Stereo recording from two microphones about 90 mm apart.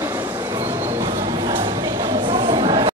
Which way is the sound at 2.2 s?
60° right (ahead or behind).